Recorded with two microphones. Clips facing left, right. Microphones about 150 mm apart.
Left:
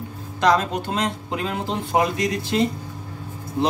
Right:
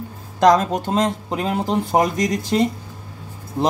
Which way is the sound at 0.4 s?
45° right (ahead or behind).